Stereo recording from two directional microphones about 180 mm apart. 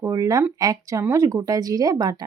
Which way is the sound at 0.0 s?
20° right (ahead or behind).